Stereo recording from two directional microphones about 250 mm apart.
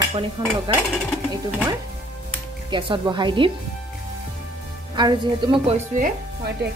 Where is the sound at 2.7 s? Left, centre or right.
Centre.